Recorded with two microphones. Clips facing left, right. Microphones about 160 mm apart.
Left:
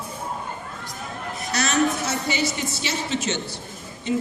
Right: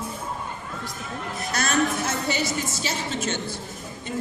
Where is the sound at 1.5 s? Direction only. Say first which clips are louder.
Left 2 dB; 50° right (ahead or behind).